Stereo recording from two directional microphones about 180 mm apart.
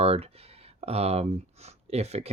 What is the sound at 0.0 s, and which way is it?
Speech, 35° right (ahead or behind).